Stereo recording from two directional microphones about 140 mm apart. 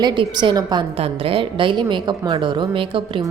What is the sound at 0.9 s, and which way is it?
A woman's voice, 45° right (ahead or behind).